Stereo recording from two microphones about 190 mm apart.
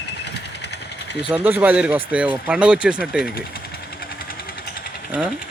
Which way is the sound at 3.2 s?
55° left (ahead or behind).